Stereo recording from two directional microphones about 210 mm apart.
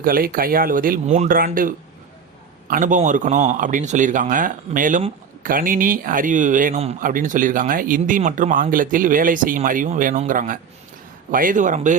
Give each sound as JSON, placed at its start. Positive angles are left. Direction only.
{"t": 0.0, "sound": "a man's voice", "side_deg": -40}